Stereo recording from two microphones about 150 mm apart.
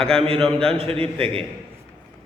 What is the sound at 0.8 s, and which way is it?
Speech, 40° right (ahead or behind).